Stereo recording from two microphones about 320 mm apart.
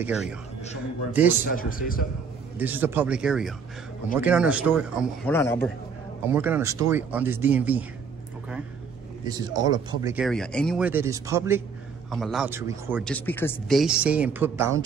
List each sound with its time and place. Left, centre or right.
0.0 s speech: centre
1.5 s a man's voice: left
2.6 s speech: centre
6.2 s speech: centre
9.2 s speech: centre
13.0 s speech: centre